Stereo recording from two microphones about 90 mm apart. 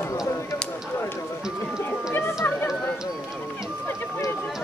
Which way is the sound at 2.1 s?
20° left (ahead or behind).